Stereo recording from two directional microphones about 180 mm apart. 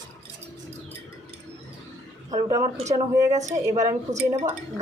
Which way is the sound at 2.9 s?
20° right (ahead or behind).